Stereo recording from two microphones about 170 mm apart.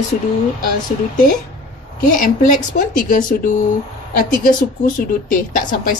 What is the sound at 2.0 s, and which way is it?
A woman's voice, 50° left (ahead or behind).